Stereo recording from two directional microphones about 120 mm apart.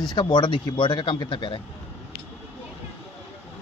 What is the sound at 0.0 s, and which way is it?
A man's voice, 35° left (ahead or behind).